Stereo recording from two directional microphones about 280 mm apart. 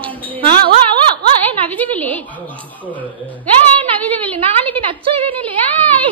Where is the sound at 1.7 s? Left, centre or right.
Centre.